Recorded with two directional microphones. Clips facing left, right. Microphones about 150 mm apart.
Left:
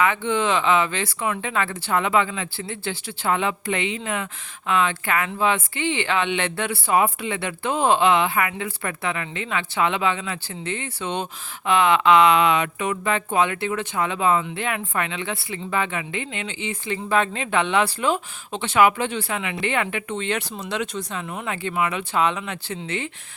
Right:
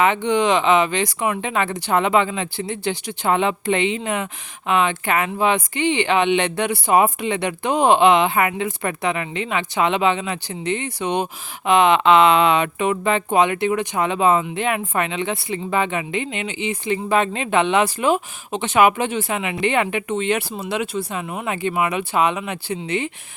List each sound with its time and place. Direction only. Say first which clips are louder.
0.0 s speech: right 4 dB; 20° right (ahead or behind)